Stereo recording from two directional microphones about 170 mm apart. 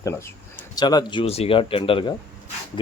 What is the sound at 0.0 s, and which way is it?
A man's voice, 15° left (ahead or behind).